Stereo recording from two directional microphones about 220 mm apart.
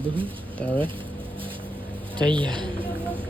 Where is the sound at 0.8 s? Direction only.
25° right (ahead or behind).